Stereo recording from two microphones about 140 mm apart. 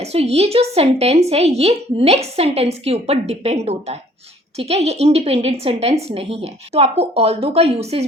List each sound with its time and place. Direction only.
0.0 s speech: 45° right (ahead or behind)